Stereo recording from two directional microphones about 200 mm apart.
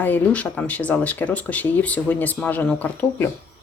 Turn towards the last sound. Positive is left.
turn(degrees=10)  # may be behind; listen again after turning